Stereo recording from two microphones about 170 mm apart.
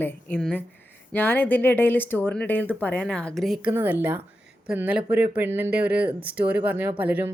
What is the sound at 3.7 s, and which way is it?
Speech, 10° right (ahead or behind).